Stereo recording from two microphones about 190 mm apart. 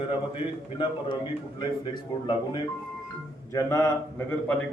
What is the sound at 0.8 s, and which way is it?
A man's voice, 25° left (ahead or behind).